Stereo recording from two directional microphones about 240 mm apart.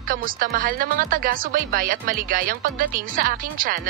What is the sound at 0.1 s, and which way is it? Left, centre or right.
Speech, right.